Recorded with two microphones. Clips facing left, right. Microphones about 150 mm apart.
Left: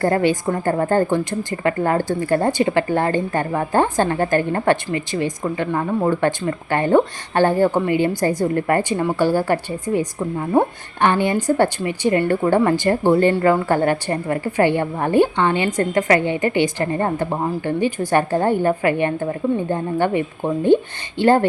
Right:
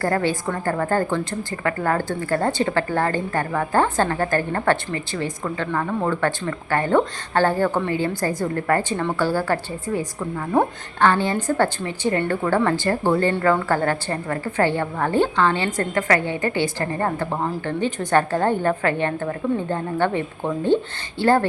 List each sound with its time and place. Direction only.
0.0 s a woman's voice: 20° left (ahead or behind)